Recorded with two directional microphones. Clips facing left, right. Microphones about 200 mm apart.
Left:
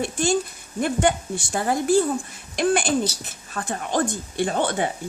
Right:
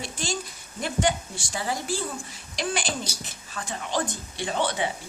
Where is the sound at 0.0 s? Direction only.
55° left (ahead or behind).